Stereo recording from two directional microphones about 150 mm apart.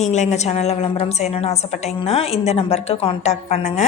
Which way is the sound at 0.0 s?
50° left (ahead or behind).